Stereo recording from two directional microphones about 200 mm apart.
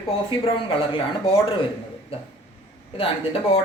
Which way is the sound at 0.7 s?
25° left (ahead or behind).